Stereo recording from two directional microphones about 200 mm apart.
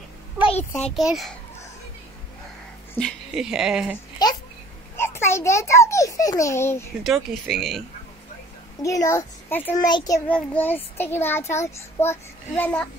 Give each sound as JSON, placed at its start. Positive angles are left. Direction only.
{"t": 0.4, "sound": "a sound", "side_deg": 30}
{"t": 0.9, "sound": "speech", "side_deg": 0}
{"t": 2.9, "sound": "speech", "side_deg": 5}
{"t": 4.2, "sound": "babbling", "side_deg": 20}
{"t": 4.9, "sound": "a child's voice", "side_deg": 10}
{"t": 7.0, "sound": "speech", "side_deg": 0}
{"t": 8.8, "sound": "a child's voice", "side_deg": 15}